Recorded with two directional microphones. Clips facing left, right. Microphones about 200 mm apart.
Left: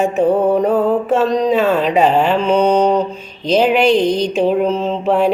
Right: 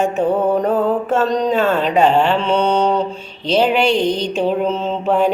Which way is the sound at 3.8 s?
35° left (ahead or behind).